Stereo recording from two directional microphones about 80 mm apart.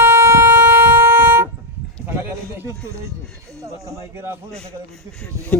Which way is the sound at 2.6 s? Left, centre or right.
Right.